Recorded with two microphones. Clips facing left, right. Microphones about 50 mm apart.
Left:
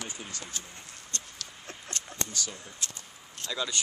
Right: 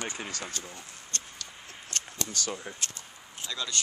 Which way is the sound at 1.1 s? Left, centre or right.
Right.